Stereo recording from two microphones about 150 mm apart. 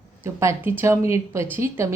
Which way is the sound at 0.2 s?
15° right (ahead or behind).